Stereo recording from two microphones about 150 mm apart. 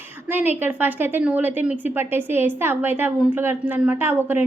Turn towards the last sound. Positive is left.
turn(degrees=-15)  # may be behind; listen again after turning